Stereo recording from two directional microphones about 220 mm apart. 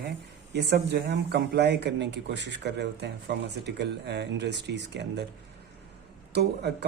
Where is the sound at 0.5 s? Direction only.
50° right (ahead or behind).